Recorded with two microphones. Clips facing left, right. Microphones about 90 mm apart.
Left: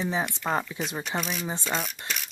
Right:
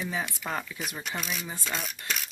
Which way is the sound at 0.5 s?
30° left (ahead or behind).